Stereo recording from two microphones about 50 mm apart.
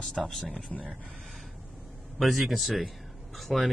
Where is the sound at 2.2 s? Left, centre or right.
Centre.